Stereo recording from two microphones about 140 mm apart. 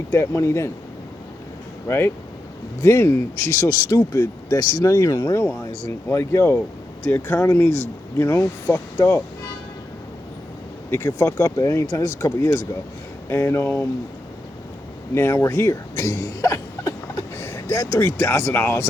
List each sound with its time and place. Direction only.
0.1 s speech: 20° left (ahead or behind)
1.9 s speech: 15° left (ahead or behind)
10.9 s speech: 20° left (ahead or behind)
15.1 s speech: 20° left (ahead or behind)